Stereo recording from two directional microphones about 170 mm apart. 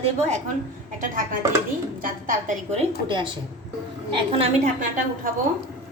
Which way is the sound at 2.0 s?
50° right (ahead or behind).